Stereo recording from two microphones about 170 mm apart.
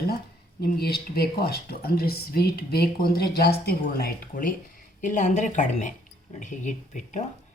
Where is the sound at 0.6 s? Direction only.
65° left (ahead or behind).